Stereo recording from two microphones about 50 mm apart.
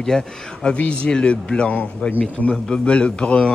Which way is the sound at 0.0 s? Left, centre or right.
Centre.